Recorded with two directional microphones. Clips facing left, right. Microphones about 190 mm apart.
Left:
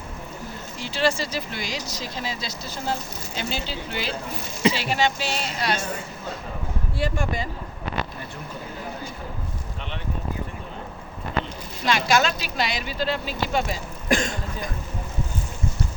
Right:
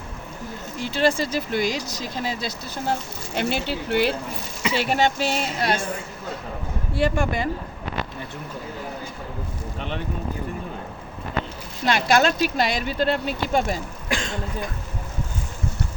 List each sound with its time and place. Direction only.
0.8 s speech: 55° right (ahead or behind)
3.3 s speech: 65° right (ahead or behind)
6.9 s speech: 60° right (ahead or behind)
11.9 s speech: 55° right (ahead or behind)